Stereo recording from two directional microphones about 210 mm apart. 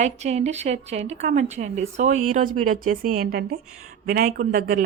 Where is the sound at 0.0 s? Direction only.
30° right (ahead or behind).